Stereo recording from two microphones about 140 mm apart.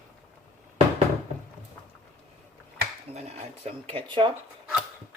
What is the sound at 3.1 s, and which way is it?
Speech, 45° right (ahead or behind).